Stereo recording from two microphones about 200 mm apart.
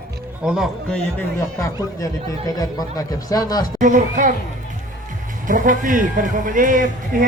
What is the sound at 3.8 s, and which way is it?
Speech, 40° right (ahead or behind).